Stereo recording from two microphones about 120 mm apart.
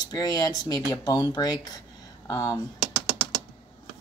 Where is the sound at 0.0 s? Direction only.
35° left (ahead or behind).